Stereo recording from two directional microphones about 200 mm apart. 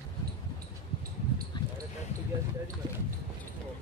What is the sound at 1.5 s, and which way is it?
Basketball bounce, 25° left (ahead or behind).